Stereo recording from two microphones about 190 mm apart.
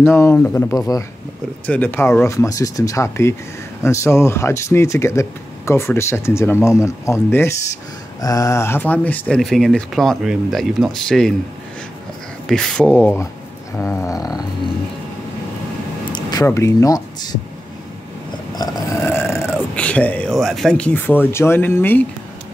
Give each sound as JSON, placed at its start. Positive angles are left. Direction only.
{"t": 0.0, "sound": "speech", "side_deg": 15}
{"t": 12.4, "sound": "speech", "side_deg": 5}
{"t": 16.1, "sound": "speech", "side_deg": 20}
{"t": 18.6, "sound": "speech", "side_deg": 20}